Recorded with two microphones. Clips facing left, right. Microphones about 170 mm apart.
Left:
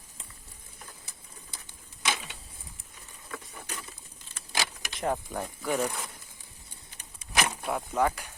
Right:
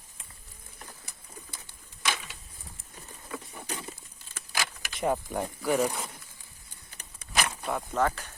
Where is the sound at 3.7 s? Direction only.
30° right (ahead or behind).